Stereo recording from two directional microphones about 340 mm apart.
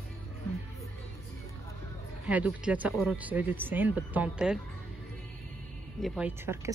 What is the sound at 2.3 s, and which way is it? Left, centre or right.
Speech, centre.